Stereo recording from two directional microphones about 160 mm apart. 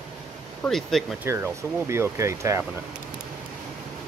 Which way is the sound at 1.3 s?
15° right (ahead or behind).